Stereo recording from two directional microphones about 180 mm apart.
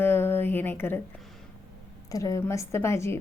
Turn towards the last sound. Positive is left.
turn(degrees=15)  # may be behind; listen again after turning